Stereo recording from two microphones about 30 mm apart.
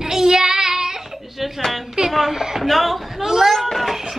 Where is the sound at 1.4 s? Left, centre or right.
Centre.